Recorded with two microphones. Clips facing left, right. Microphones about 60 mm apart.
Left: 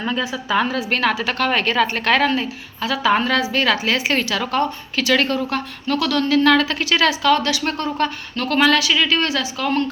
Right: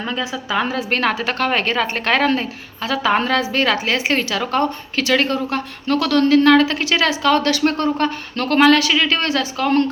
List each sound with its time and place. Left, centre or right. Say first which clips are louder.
0.1 s a woman's voice: left 2 dB; left
0.6 s a woman's voice: even; right
0.9 s a woman's voice: even; right